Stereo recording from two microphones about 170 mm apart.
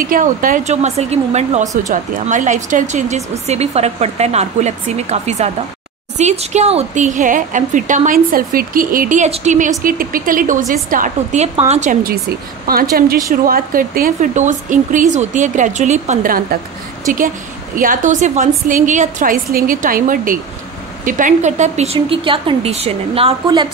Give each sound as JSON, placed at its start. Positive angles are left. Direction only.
{"t": 0.0, "sound": "a woman's voice", "side_deg": -55}
{"t": 9.8, "sound": "speech", "side_deg": -55}
{"t": 17.7, "sound": "a woman's voice", "side_deg": -50}